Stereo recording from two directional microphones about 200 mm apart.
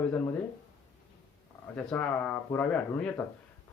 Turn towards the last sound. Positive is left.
turn(degrees=5)  # may be behind; listen again after turning